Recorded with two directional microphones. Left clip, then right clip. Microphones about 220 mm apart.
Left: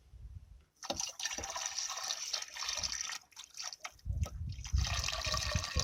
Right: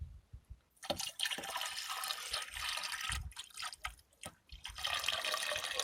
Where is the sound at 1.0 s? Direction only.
15° right (ahead or behind).